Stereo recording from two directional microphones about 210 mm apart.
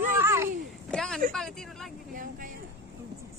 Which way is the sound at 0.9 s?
5° left (ahead or behind).